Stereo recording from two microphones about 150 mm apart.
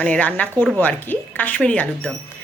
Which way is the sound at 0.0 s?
10° left (ahead or behind).